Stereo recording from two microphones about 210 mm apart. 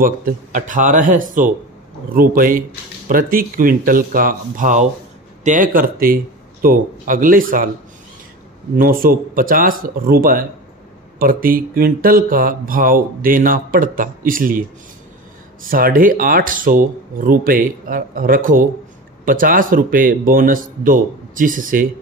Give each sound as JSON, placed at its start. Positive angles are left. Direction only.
{"t": 0.0, "sound": "speech", "side_deg": -40}
{"t": 8.7, "sound": "speech", "side_deg": -40}